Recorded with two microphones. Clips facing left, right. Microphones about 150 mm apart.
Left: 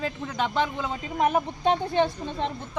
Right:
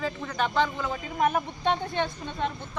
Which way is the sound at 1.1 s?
25° left (ahead or behind).